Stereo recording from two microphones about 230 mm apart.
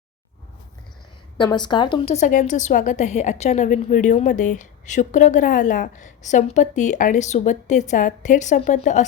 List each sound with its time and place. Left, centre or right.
1.4 s a woman's voice: centre